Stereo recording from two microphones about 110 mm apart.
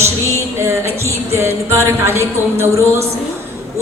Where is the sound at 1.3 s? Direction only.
25° right (ahead or behind).